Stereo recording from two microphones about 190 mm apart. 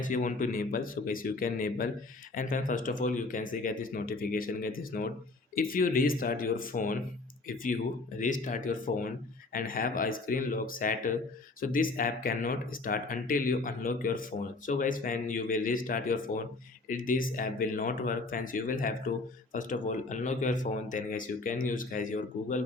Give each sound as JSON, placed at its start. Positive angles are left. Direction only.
{"t": 0.0, "sound": "speech", "side_deg": 45}